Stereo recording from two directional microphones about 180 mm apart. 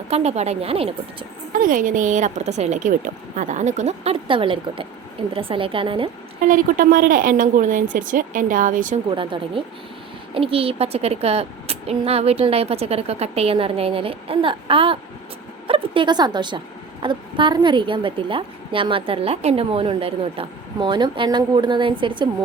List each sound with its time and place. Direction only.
0.1 s a woman's voice: 35° right (ahead or behind)
1.5 s a woman's voice: 45° right (ahead or behind); by 6.1 s 30° right (ahead or behind)
6.5 s a woman's voice: 50° right (ahead or behind)
9.1 s a woman's voice: 30° right (ahead or behind)